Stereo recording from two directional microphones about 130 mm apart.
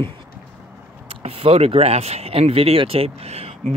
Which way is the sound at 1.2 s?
50° right (ahead or behind).